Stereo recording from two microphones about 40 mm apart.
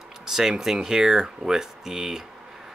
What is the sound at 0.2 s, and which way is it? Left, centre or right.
Speech, centre.